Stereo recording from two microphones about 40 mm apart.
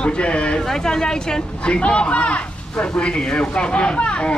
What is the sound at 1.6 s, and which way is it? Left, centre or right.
Speech, left.